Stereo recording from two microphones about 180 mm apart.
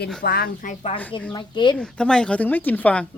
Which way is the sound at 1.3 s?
25° left (ahead or behind).